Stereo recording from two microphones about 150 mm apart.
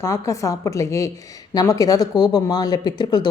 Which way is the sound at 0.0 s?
20° left (ahead or behind).